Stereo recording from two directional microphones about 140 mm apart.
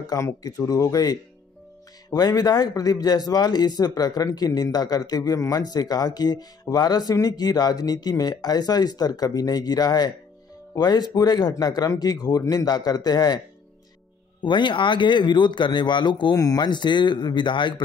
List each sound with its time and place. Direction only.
0.0 s speech: 25° left (ahead or behind)
14.4 s speech: 35° left (ahead or behind)